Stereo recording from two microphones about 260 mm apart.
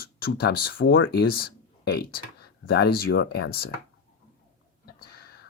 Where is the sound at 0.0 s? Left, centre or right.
Left.